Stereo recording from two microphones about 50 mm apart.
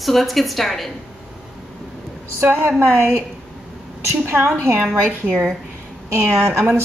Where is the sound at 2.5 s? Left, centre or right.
Right.